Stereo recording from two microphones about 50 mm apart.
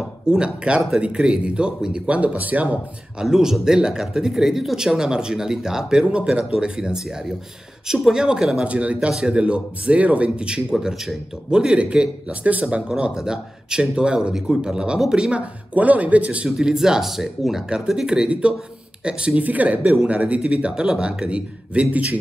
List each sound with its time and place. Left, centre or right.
0.3 s speech: centre
2.1 s speech: right
3.2 s speech: centre; by 12.8 s right
13.0 s speech: centre
15.7 s speech: right
16.4 s speech: centre